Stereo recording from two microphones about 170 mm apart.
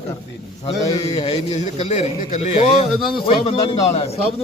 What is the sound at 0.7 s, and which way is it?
A man's voice, 35° left (ahead or behind).